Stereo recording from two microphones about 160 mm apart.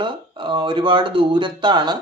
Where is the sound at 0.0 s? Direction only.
30° right (ahead or behind).